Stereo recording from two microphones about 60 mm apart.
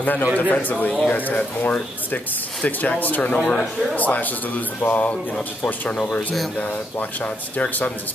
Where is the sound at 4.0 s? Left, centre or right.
Left.